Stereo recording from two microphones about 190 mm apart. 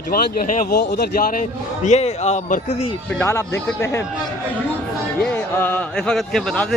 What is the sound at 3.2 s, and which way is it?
Speech, 15° left (ahead or behind).